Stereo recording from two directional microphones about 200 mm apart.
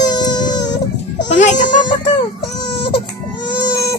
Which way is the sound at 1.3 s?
35° left (ahead or behind).